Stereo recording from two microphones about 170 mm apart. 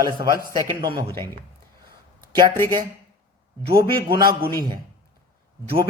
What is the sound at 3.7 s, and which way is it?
Speech, 20° right (ahead or behind).